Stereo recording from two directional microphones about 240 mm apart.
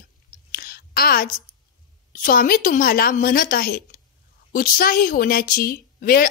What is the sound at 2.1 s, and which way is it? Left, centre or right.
A woman's voice, left.